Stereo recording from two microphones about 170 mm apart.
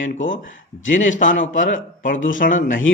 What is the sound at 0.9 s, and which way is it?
Speech, 50° left (ahead or behind).